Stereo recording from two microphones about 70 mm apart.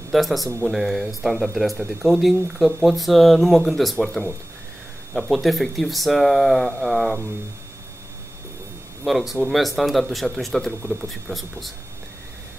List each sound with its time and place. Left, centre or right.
0.1 s speech: centre
9.0 s speech: centre